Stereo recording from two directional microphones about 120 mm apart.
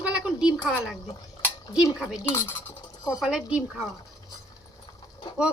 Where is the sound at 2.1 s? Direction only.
20° left (ahead or behind).